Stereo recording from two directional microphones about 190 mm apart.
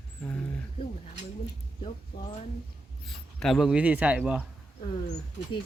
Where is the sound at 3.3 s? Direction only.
Centre (ahead or behind).